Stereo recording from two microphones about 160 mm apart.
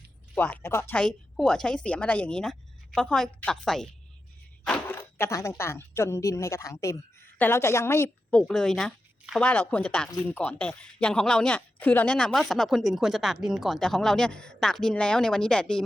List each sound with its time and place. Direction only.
0.3 s a woman's voice: 10° left (ahead or behind)
8.4 s speech: 5° left (ahead or behind)